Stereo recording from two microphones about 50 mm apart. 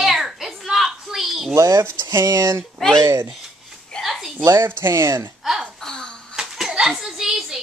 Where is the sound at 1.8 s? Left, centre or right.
Right.